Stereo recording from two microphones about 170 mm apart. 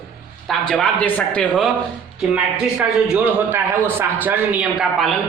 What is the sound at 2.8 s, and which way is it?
A man's voice, 5° right (ahead or behind).